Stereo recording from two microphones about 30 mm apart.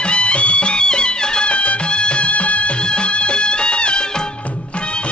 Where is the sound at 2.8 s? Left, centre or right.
Left.